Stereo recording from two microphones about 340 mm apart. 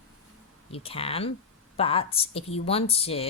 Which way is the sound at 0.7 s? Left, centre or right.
Centre.